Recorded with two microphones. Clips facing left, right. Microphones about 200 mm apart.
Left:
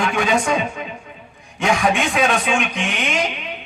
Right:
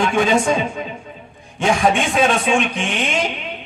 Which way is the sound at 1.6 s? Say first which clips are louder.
Right 2 dB; 30° right (ahead or behind).